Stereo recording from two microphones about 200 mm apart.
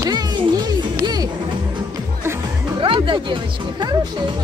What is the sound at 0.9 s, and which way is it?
Music, 20° right (ahead or behind).